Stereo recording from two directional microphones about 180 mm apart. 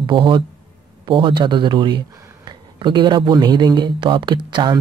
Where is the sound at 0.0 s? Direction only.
25° right (ahead or behind).